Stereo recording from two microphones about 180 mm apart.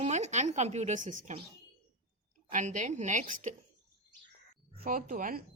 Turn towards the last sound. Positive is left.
turn(degrees=-50)  # may be behind; listen again after turning